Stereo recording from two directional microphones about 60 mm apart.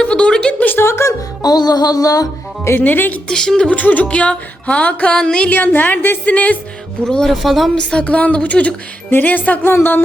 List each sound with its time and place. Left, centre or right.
0.0 s a sound: centre
0.6 s a sound: left
0.9 s music: left
1.4 s music: left
2.8 s speech: left
3.2 s speech: centre
3.7 s a woman's voice: left
5.5 s a woman's voice: left
7.0 s speech: centre
7.4 s speech: centre
7.8 s a woman's voice: centre